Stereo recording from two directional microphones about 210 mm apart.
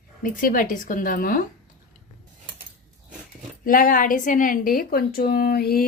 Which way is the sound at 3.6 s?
40° left (ahead or behind).